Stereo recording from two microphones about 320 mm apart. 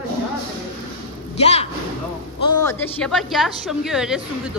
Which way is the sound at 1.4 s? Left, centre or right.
Centre.